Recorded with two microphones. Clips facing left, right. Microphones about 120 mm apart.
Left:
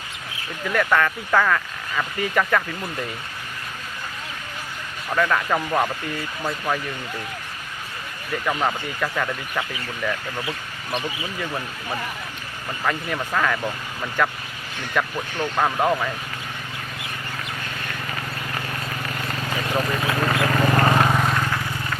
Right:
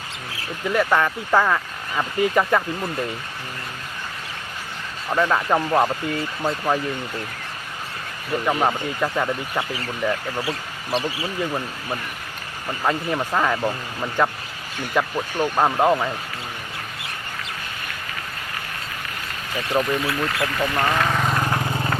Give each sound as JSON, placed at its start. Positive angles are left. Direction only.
{"t": 0.7, "sound": "speech", "side_deg": -20}
{"t": 5.1, "sound": "speech", "side_deg": -20}
{"t": 8.3, "sound": "speech", "side_deg": -20}
{"t": 12.8, "sound": "speech", "side_deg": -25}
{"t": 20.1, "sound": "speech", "side_deg": 40}
{"t": 21.1, "sound": "vehicle", "side_deg": 0}
{"t": 21.4, "sound": "vehicle", "side_deg": -40}